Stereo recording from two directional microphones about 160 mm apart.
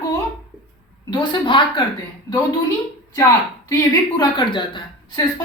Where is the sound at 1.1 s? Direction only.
30° left (ahead or behind).